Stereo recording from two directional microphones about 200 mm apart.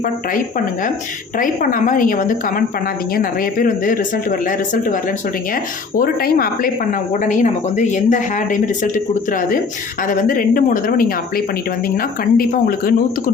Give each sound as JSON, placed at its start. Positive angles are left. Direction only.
{"t": 1.4, "sound": "speech", "side_deg": 45}
{"t": 6.0, "sound": "speech", "side_deg": 50}
{"t": 7.1, "sound": "a woman's voice", "side_deg": 40}
{"t": 10.1, "sound": "speech", "side_deg": 45}